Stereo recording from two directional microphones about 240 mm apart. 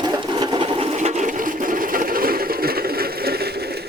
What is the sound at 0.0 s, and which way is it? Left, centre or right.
Sewing machine, centre.